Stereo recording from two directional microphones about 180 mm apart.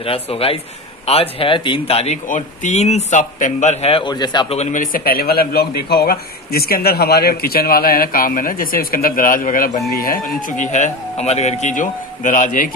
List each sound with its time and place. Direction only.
0.0 s speech: 30° left (ahead or behind)
4.6 s a man's voice: 45° left (ahead or behind)